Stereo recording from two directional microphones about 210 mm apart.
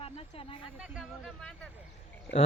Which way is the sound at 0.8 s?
5° right (ahead or behind).